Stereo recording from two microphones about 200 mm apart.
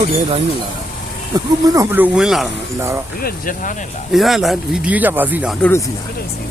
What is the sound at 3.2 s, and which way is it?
Speech, 45° left (ahead or behind).